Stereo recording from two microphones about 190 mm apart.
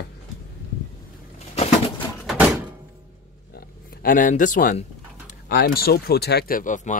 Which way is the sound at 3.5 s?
45° left (ahead or behind).